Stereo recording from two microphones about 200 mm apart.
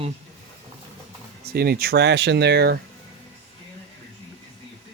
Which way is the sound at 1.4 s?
50° right (ahead or behind).